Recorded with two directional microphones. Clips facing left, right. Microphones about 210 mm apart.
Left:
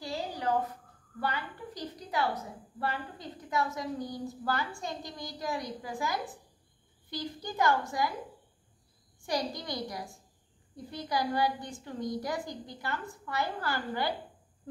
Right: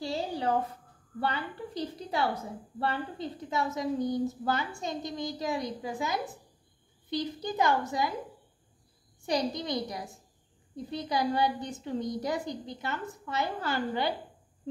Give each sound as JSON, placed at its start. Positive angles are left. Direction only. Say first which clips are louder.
{"t": 0.0, "sound": "a sound", "louder": "right 3 dB", "side_deg": -25}
{"t": 1.2, "sound": "a woman's voice", "louder": "right 2 dB", "side_deg": -25}
{"t": 9.2, "sound": "a woman's voice", "louder": "right 3 dB", "side_deg": -20}